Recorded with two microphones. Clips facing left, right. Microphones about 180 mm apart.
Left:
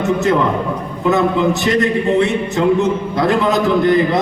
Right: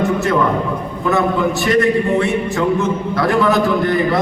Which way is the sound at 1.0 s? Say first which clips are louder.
Left 2 dB; 20° left (ahead or behind).